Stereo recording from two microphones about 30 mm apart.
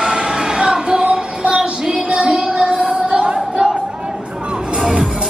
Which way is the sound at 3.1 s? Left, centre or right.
Right.